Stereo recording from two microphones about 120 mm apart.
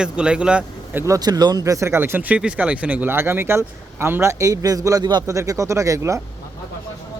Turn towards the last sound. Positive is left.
turn(degrees=-25)  # may be behind; listen again after turning